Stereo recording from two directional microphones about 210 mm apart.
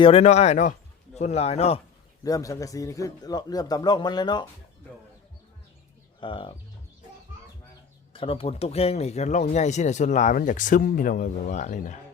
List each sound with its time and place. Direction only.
0.0 s speech: 30° left (ahead or behind)
2.2 s a man's voice: 15° left (ahead or behind)
6.1 s speech: 25° left (ahead or behind)
8.1 s speech: 25° left (ahead or behind)